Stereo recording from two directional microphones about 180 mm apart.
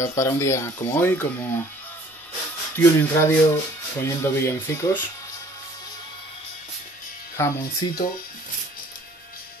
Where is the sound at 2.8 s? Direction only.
15° left (ahead or behind).